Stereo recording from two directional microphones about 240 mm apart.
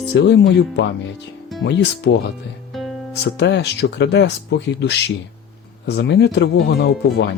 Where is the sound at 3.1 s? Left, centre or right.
Left.